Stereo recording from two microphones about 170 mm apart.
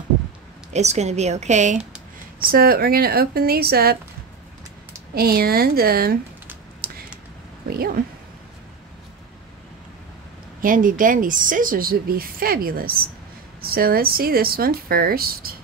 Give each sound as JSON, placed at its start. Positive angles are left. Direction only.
{"t": 0.7, "sound": "a woman's voice", "side_deg": -40}
{"t": 2.4, "sound": "speech", "side_deg": -60}
{"t": 5.1, "sound": "speech", "side_deg": -65}
{"t": 6.8, "sound": "computer keyboard", "side_deg": -65}
{"t": 7.7, "sound": "speech", "side_deg": -60}
{"t": 10.6, "sound": "a woman's voice", "side_deg": -55}